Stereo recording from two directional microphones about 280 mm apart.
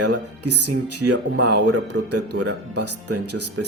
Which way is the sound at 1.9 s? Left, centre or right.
Right.